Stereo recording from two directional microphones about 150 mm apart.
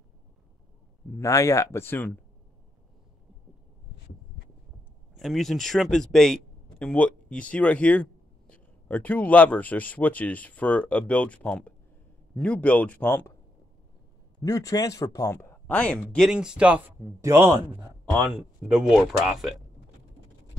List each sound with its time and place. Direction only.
1.1 s speech: 20° left (ahead or behind)
5.1 s speech: centre (ahead or behind)
14.4 s speech: 25° left (ahead or behind); by 17.6 s 20° right (ahead or behind)
18.3 s speech: 5° right (ahead or behind)